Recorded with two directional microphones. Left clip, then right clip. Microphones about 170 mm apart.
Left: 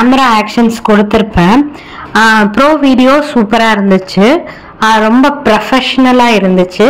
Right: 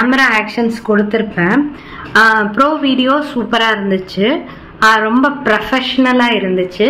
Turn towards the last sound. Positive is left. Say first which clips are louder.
# left 6 dB
turn(degrees=40)  # may be behind; listen again after turning